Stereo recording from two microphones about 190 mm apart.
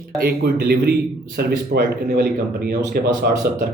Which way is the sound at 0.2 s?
55° right (ahead or behind).